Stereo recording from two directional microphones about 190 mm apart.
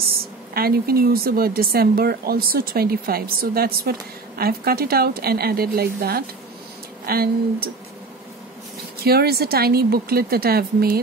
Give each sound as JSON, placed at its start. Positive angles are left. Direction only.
{"t": 0.6, "sound": "speech", "side_deg": -50}
{"t": 9.0, "sound": "speech", "side_deg": -55}